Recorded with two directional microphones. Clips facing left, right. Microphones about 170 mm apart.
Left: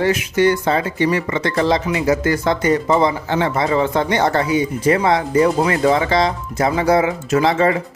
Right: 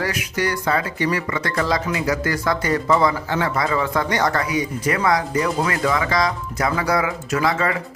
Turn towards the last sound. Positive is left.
turn(degrees=25)  # may be behind; listen again after turning